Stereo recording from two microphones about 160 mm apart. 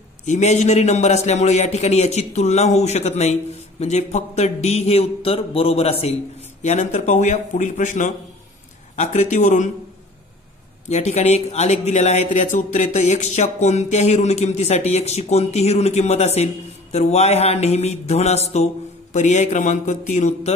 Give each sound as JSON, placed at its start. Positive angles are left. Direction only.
{"t": 0.2, "sound": "a man's voice", "side_deg": 45}
{"t": 10.9, "sound": "speech", "side_deg": 45}